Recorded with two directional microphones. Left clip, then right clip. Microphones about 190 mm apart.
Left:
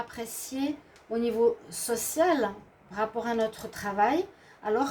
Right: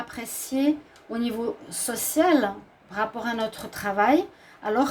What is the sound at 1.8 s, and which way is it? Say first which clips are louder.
Speech: right 3 dB; 45° right (ahead or behind).